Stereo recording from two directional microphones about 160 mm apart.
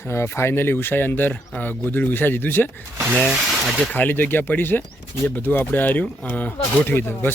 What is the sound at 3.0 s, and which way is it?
Speech, 15° right (ahead or behind).